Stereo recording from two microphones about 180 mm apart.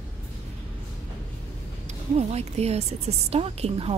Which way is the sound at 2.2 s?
35° right (ahead or behind).